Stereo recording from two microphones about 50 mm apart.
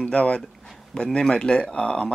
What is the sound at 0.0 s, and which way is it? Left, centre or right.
Speech, left.